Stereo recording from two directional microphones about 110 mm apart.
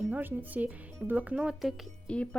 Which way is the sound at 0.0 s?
15° right (ahead or behind).